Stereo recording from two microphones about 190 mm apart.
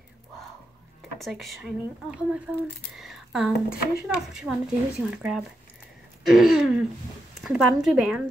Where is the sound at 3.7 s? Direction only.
5° right (ahead or behind).